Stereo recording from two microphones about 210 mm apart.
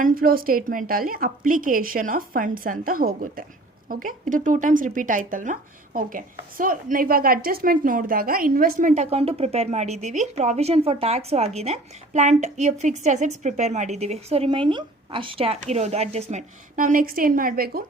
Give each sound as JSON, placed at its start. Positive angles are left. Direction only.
{"t": 0.0, "sound": "a woman's voice", "side_deg": -45}